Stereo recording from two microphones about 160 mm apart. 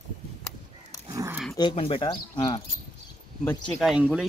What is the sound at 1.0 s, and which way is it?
Dog, 20° right (ahead or behind).